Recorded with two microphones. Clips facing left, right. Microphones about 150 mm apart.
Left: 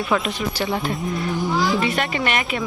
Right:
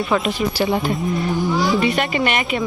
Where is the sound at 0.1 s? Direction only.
5° right (ahead or behind).